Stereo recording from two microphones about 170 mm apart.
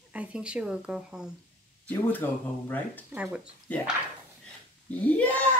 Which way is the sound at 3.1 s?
5° right (ahead or behind).